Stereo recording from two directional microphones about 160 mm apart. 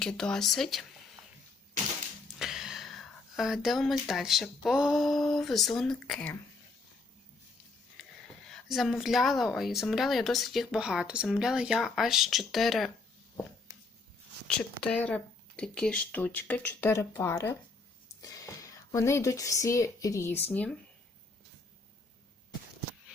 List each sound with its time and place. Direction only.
0.0 s speech: 5° left (ahead or behind)
2.2 s a sound: centre (ahead or behind)
4.1 s speech: centre (ahead or behind)
8.4 s speech: centre (ahead or behind)
14.4 s speech: 5° left (ahead or behind)